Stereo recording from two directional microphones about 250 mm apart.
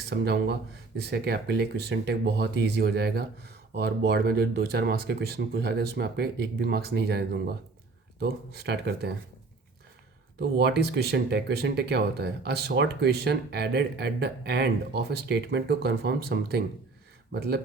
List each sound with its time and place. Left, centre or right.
0.1 s speech: right
10.6 s speech: right